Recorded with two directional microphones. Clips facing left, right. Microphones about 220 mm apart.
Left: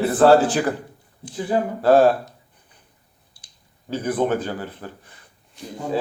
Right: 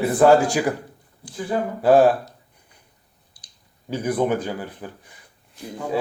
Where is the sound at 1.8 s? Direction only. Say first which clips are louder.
Even; 15° right (ahead or behind).